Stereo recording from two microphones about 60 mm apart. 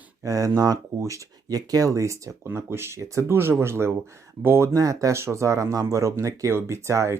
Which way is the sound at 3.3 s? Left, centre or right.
Right.